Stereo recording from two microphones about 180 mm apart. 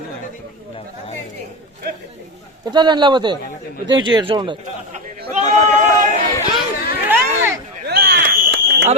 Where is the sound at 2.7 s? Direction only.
25° right (ahead or behind).